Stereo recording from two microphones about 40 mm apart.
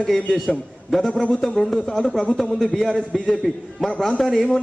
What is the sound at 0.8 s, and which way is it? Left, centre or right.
A man's voice, centre.